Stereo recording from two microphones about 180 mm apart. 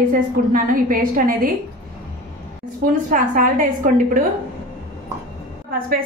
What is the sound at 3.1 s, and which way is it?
Speech, 50° right (ahead or behind).